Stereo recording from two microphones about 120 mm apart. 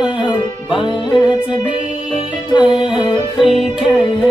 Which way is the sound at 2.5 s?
40° left (ahead or behind).